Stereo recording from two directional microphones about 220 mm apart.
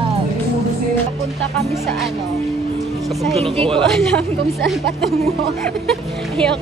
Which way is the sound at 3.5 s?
25° right (ahead or behind).